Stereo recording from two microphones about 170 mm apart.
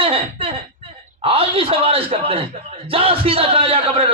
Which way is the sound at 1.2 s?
35° right (ahead or behind).